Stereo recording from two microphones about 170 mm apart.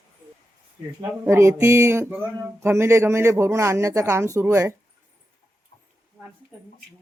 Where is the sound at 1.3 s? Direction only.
15° right (ahead or behind).